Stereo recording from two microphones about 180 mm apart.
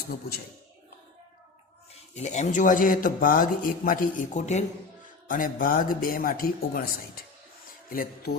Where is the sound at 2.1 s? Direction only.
40° left (ahead or behind).